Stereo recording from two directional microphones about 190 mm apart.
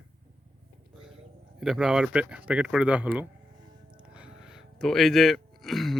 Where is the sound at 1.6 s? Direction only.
5° right (ahead or behind).